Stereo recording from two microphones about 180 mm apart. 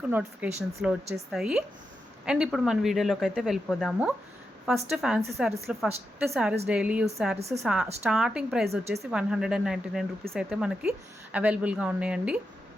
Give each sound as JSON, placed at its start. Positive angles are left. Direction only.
{"t": 0.1, "sound": "a woman's voice", "side_deg": -5}
{"t": 7.3, "sound": "speech", "side_deg": -35}
{"t": 7.6, "sound": "a woman's voice", "side_deg": -5}